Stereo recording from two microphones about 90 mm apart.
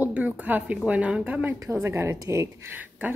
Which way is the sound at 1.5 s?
30° right (ahead or behind).